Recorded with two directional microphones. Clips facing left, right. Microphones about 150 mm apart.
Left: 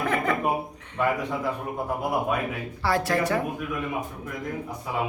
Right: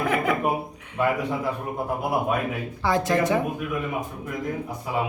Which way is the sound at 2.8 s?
20° right (ahead or behind).